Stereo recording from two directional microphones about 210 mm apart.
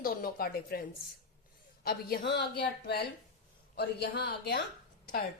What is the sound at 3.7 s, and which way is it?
Speech, 50° left (ahead or behind).